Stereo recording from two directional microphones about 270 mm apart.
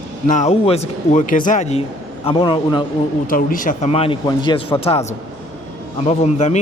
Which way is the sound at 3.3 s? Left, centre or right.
Left.